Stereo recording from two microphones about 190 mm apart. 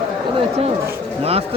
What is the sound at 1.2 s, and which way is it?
Speech, 30° right (ahead or behind).